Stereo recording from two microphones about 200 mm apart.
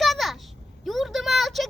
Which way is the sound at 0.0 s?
Centre (ahead or behind).